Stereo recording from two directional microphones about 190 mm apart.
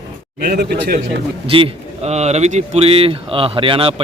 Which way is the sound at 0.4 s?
55° right (ahead or behind).